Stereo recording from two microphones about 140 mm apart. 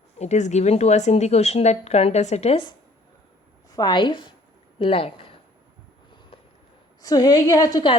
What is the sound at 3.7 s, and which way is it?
A woman's voice, 30° left (ahead or behind).